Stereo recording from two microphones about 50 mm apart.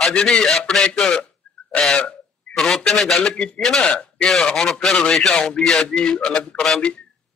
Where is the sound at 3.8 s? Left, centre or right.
Centre.